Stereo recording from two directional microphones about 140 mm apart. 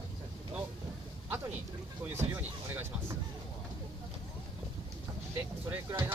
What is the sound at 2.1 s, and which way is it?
Speech, 15° right (ahead or behind).